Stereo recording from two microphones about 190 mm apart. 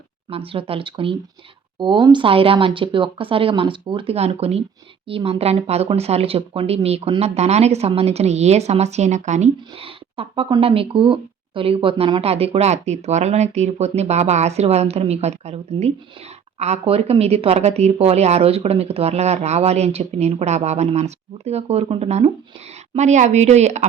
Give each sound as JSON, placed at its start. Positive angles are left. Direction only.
{"t": 0.3, "sound": "speech", "side_deg": -30}